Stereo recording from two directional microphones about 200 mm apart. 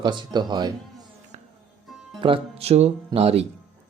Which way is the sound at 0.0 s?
20° right (ahead or behind).